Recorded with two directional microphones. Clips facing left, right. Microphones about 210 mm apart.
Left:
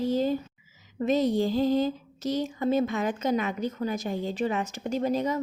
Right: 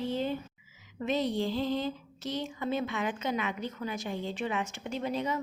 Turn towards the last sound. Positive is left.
turn(degrees=40)  # may be behind; listen again after turning